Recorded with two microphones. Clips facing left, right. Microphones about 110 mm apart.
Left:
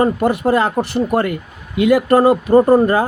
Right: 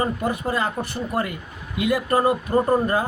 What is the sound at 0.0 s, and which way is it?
A man's voice, 75° left (ahead or behind).